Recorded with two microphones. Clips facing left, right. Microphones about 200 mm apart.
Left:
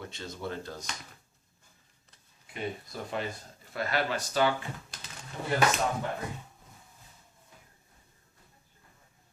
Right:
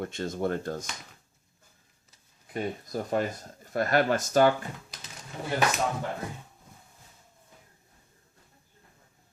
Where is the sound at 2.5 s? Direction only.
45° right (ahead or behind).